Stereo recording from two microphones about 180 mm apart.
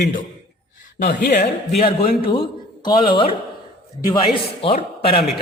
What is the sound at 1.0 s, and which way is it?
Speech, 60° left (ahead or behind).